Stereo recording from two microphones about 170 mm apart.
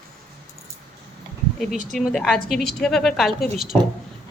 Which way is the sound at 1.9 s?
Centre (ahead or behind).